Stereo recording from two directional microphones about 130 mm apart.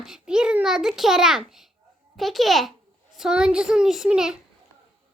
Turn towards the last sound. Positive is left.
turn(degrees=-5)  # may be behind; listen again after turning